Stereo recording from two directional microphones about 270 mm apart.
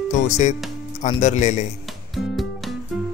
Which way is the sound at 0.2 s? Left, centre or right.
Left.